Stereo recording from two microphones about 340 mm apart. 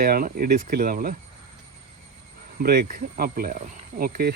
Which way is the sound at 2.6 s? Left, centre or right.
Right.